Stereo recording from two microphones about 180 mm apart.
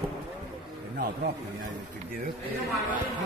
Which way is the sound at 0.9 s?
50° right (ahead or behind).